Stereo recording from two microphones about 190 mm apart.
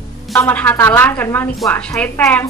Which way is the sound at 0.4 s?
10° left (ahead or behind).